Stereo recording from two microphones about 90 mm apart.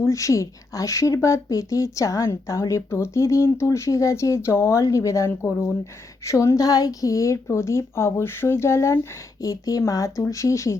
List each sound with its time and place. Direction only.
0.0 s speech: 35° left (ahead or behind)